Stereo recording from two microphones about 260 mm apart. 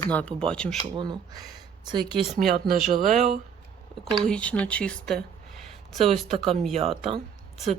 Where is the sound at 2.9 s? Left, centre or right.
Right.